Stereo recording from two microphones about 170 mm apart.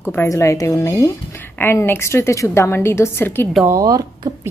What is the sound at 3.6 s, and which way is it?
Speech, 20° right (ahead or behind).